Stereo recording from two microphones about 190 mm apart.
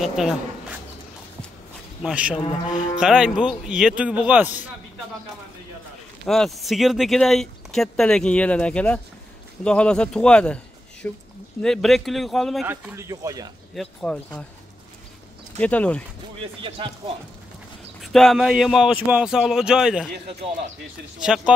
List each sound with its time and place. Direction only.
0.0 s speech: centre (ahead or behind)
2.0 s speech: 5° right (ahead or behind)
6.2 s a man's voice: centre (ahead or behind)
12.6 s speech: 10° right (ahead or behind)
13.7 s speech: 5° left (ahead or behind)
15.6 s speech: 5° left (ahead or behind)
16.6 s speech: 25° right (ahead or behind)
18.0 s speech: centre (ahead or behind)
21.2 s speech: 5° right (ahead or behind)